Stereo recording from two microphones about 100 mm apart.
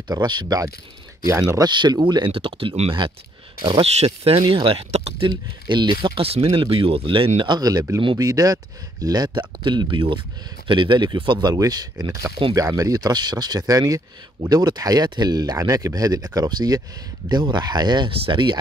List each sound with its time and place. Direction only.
0.1 s speech: 45° right (ahead or behind)
1.7 s speech: 45° right (ahead or behind); by 5.3 s 80° right
5.7 s speech: 50° right (ahead or behind)
6.2 s speech: 70° right (ahead or behind); by 11.3 s 50° right (ahead or behind)
11.4 s speech: 40° right (ahead or behind)